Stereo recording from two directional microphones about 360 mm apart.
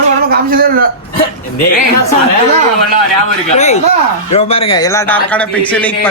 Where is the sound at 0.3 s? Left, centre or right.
Right.